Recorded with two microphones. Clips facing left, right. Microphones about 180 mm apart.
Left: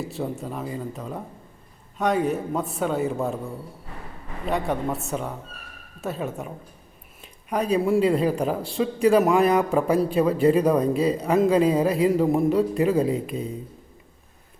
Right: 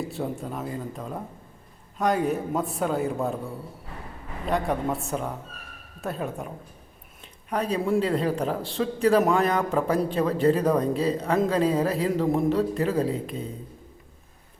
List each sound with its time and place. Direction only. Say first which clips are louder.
0.0 s a man's voice: left 1 dB; centre (ahead or behind)
4.4 s a man's voice: even; centre (ahead or behind)
7.5 s a man's voice: left 3 dB; 10° left (ahead or behind)